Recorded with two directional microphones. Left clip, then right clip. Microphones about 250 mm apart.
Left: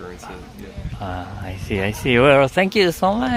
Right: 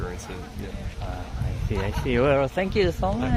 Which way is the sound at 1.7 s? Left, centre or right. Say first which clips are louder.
Left 8 dB; left.